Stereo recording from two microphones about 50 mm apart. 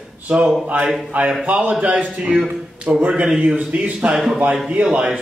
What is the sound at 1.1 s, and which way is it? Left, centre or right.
A man's voice, right.